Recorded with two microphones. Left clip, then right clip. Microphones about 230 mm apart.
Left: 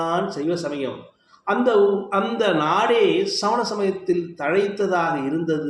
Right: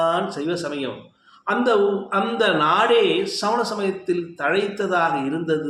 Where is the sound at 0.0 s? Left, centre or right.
Centre.